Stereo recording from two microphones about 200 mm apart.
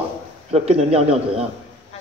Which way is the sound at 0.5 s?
30° right (ahead or behind).